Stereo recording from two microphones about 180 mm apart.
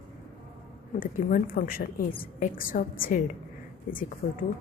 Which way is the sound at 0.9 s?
50° left (ahead or behind).